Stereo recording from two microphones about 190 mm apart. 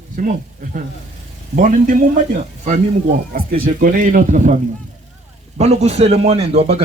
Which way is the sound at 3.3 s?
50° right (ahead or behind).